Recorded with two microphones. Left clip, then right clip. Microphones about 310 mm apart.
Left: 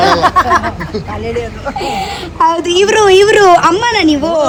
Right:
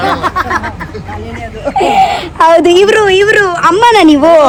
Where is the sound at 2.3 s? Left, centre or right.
Right.